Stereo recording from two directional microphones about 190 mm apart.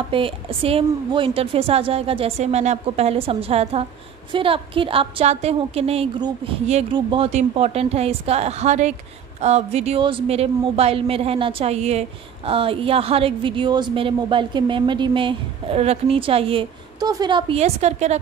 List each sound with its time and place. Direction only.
0.1 s a woman's voice: 30° right (ahead or behind)